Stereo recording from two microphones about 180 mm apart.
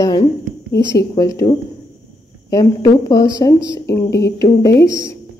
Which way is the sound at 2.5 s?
20° left (ahead or behind).